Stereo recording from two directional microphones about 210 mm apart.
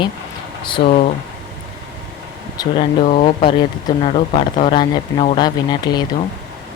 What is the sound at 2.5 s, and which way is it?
Speech, 20° left (ahead or behind).